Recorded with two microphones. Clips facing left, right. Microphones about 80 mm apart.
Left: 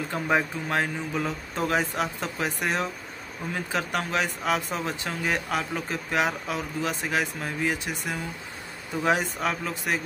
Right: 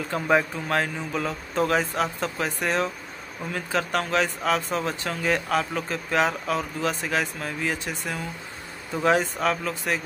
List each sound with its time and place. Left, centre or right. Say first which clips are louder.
0.1 s speech: right 4 dB; centre